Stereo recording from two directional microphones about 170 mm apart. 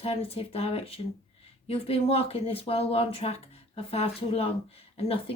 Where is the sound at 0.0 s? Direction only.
35° left (ahead or behind).